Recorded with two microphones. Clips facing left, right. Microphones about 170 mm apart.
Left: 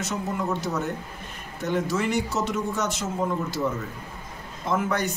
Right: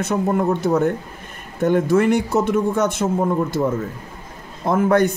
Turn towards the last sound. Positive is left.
turn(degrees=-55)  # may be behind; listen again after turning